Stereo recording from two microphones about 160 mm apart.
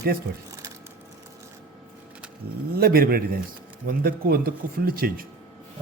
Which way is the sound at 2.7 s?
70° right (ahead or behind).